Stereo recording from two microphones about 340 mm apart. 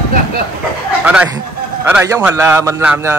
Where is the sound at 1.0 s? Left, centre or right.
Centre.